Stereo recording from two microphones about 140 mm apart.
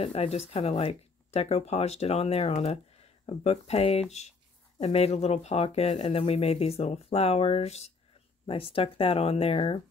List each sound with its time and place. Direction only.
0.0 s speech: 45° left (ahead or behind)